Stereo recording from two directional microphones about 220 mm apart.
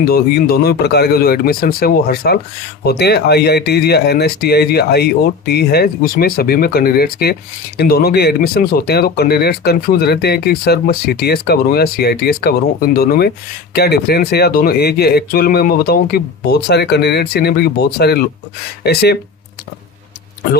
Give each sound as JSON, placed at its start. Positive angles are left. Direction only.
{"t": 0.1, "sound": "speech", "side_deg": 45}